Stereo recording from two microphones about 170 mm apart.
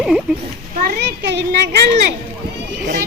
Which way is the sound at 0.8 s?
80° right.